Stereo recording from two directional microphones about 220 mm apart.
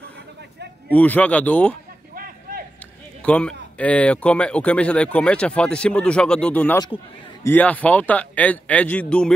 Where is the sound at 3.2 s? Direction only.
5° left (ahead or behind).